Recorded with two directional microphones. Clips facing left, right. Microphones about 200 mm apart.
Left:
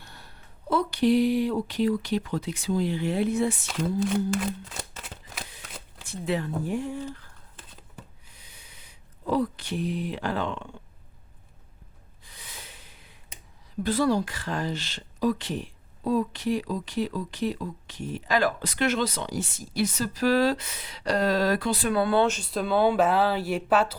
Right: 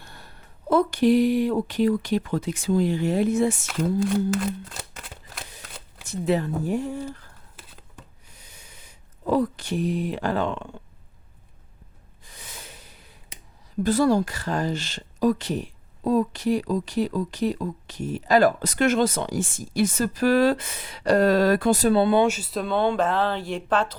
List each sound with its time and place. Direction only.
0.0 s a sound: 50° right (ahead or behind)
0.7 s speech: 50° right (ahead or behind)
3.7 s speech: centre (ahead or behind)
6.1 s speech: 40° right (ahead or behind)
8.3 s a sound: 45° right (ahead or behind)
12.2 s snort: 45° right (ahead or behind)
13.8 s speech: 45° right (ahead or behind)
21.8 s speech: 25° right (ahead or behind)
22.3 s speech: 5° right (ahead or behind)